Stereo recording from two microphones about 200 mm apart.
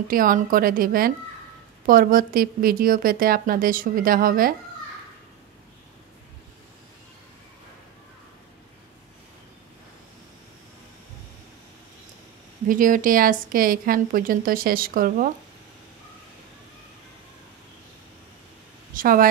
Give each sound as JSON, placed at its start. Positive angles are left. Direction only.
{"t": 0.1, "sound": "a woman's voice", "side_deg": -45}
{"t": 12.6, "sound": "a woman's voice", "side_deg": -40}
{"t": 18.9, "sound": "a woman's voice", "side_deg": -45}